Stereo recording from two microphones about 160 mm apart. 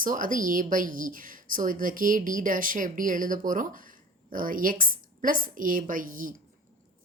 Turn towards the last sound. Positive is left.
turn(degrees=-55)  # may be behind; listen again after turning